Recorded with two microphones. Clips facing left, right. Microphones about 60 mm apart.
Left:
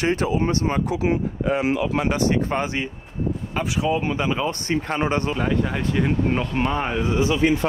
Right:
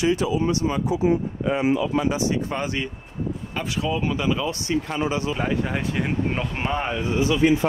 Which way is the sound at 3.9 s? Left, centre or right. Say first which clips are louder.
Even; left.